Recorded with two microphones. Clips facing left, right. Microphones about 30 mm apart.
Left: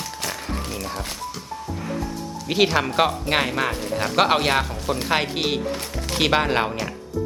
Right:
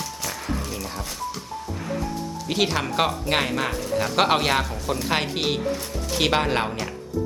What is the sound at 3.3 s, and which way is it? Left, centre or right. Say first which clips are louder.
Speech: left 1 dB; left.